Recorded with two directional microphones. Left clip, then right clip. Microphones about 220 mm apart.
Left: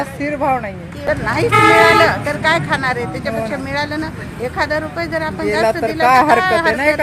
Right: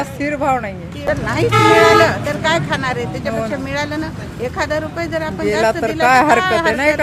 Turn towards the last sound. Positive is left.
turn(degrees=0)  # may be behind; listen again after turning